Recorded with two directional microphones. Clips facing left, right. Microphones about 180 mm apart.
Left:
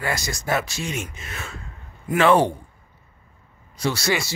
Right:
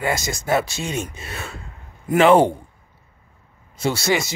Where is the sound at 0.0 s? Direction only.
25° right (ahead or behind).